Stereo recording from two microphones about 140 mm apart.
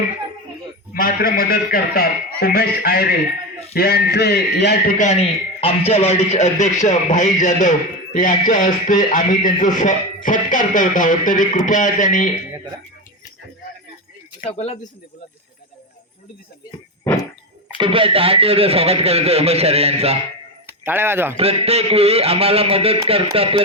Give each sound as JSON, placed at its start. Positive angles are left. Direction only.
{"t": 0.9, "sound": "a man's voice", "side_deg": 90}
{"t": 4.9, "sound": "speech", "side_deg": 60}
{"t": 14.4, "sound": "speech", "side_deg": 50}
{"t": 17.1, "sound": "a sound", "side_deg": 10}
{"t": 17.7, "sound": "speech", "side_deg": -40}
{"t": 20.7, "sound": "speech", "side_deg": -15}
{"t": 21.3, "sound": "speech", "side_deg": -45}